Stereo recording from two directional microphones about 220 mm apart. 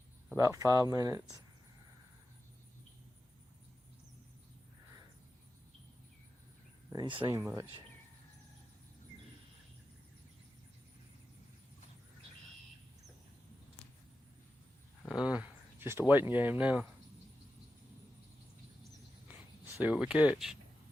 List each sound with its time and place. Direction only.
0.3 s speech: 15° right (ahead or behind)
6.9 s speech: 20° right (ahead or behind)
15.1 s speech: 5° right (ahead or behind)
19.3 s speech: 10° right (ahead or behind)